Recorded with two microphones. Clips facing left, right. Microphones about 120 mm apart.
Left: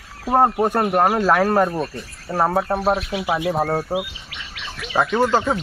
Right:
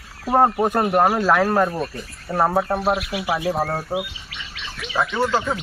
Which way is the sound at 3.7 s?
5° left (ahead or behind).